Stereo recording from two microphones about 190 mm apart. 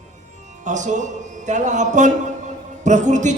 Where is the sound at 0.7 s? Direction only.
40° right (ahead or behind).